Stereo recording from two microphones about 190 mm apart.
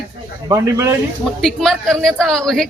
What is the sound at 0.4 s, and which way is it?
Speech, 15° right (ahead or behind).